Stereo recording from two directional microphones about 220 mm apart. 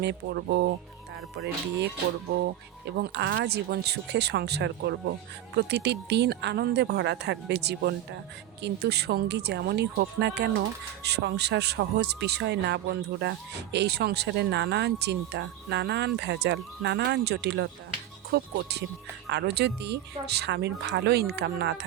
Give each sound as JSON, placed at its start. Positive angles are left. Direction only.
{"t": 0.0, "sound": "speech", "side_deg": -50}
{"t": 3.0, "sound": "speech", "side_deg": -50}